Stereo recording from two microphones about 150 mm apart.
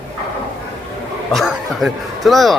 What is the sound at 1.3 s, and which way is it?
Speech, centre (ahead or behind).